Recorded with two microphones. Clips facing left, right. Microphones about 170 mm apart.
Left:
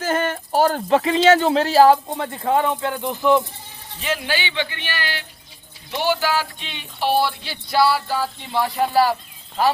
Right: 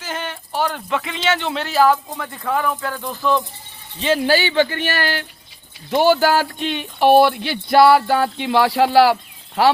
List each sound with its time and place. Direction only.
0.0 s speech: 50° left (ahead or behind); by 3.4 s 20° left (ahead or behind)
4.0 s speech: 35° right (ahead or behind); by 9.7 s 75° right (ahead or behind)